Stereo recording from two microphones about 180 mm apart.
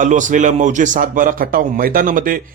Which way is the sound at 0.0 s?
45° right (ahead or behind).